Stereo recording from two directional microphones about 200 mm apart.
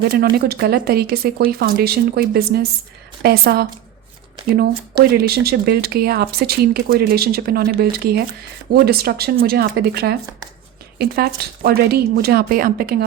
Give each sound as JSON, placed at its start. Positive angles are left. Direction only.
{"t": 0.1, "sound": "speech", "side_deg": -50}